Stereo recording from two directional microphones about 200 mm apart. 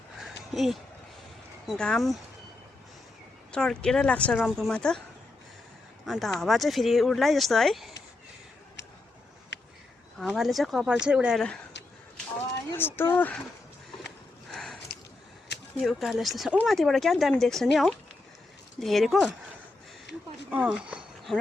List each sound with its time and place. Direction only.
0.5 s speech: centre (ahead or behind)
3.5 s speech: 5° left (ahead or behind)
6.1 s speech: centre (ahead or behind)
9.5 s a sound: 60° left (ahead or behind)
10.2 s speech: centre (ahead or behind)
12.7 s speech: 10° left (ahead or behind)
14.5 s a sound: centre (ahead or behind)
15.8 s speech: centre (ahead or behind)
18.8 s speech: centre (ahead or behind)
20.5 s a sound: 5° right (ahead or behind)